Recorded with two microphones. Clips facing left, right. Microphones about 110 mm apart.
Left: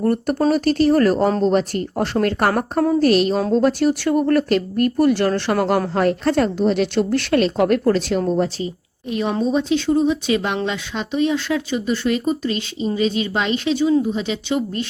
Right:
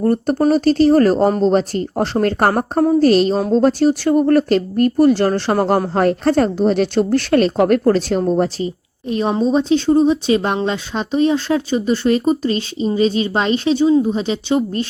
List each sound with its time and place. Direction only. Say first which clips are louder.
0.0 s speech: right 3 dB; 30° right (ahead or behind)